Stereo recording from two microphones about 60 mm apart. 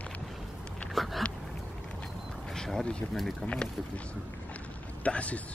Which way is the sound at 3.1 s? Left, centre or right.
Centre.